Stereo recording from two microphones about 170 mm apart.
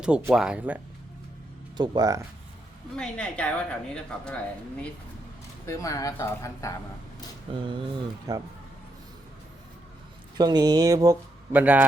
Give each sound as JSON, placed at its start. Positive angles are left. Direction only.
{"t": 0.0, "sound": "speech", "side_deg": -10}
{"t": 1.8, "sound": "speech", "side_deg": -25}
{"t": 2.9, "sound": "a woman's voice", "side_deg": 5}
{"t": 5.6, "sound": "speech", "side_deg": 20}
{"t": 7.5, "sound": "speech", "side_deg": -30}
{"t": 10.3, "sound": "speech", "side_deg": -25}